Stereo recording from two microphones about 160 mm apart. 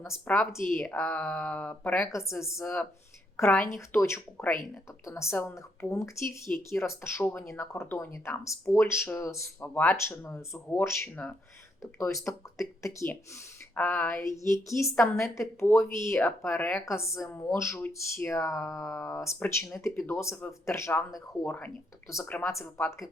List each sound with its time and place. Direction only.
0.3 s speech: 10° left (ahead or behind)
12.2 s speech: 20° left (ahead or behind)